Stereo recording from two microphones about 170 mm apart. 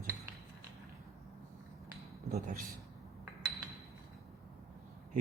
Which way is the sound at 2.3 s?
50° right (ahead or behind).